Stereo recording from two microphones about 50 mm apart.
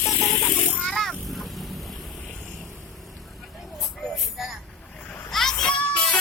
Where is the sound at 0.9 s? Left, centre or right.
Centre.